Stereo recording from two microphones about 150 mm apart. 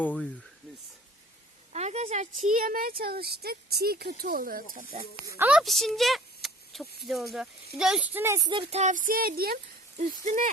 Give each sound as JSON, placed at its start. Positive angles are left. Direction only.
{"t": 0.0, "sound": "speech", "side_deg": 10}
{"t": 1.7, "sound": "speech", "side_deg": -45}
{"t": 4.9, "sound": "speech", "side_deg": -45}
{"t": 5.4, "sound": "speech", "side_deg": -5}
{"t": 8.2, "sound": "speech", "side_deg": -20}
{"t": 8.4, "sound": "speech", "side_deg": -35}
{"t": 10.0, "sound": "speech", "side_deg": -55}